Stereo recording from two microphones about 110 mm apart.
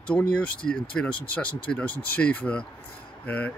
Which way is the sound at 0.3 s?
10° left (ahead or behind).